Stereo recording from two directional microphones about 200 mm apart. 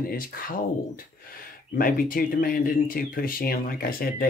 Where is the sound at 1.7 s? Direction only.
45° left (ahead or behind).